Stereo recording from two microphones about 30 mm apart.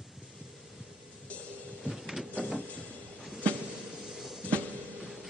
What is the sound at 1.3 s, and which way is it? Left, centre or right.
Music, left.